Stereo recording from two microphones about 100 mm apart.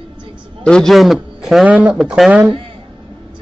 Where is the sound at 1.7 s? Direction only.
10° right (ahead or behind).